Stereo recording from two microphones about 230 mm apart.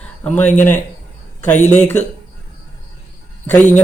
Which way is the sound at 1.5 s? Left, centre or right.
Left.